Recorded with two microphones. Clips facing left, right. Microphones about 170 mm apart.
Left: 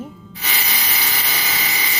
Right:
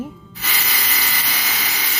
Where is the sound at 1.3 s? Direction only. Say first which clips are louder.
Left 2 dB; 5° left (ahead or behind).